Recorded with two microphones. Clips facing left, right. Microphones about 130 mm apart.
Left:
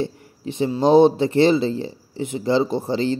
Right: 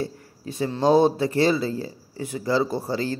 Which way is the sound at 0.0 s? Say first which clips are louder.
Left 4 dB; 25° left (ahead or behind).